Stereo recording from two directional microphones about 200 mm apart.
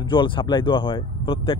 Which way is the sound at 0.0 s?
25° left (ahead or behind).